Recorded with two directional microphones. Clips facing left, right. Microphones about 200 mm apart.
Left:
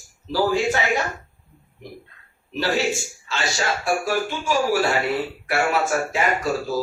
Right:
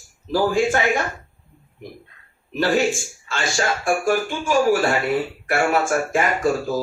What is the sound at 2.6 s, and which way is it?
Speech, 50° right (ahead or behind).